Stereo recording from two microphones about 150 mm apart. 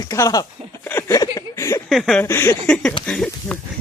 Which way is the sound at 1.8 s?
Centre (ahead or behind).